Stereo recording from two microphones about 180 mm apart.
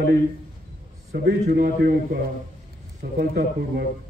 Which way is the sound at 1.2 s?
55° right (ahead or behind).